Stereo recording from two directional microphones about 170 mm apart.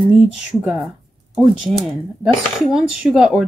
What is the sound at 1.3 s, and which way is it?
A child's voice, centre (ahead or behind).